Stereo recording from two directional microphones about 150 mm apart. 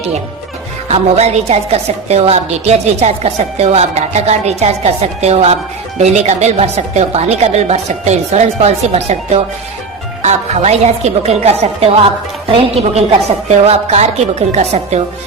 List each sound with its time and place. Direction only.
0.9 s a woman's voice: 45° right (ahead or behind)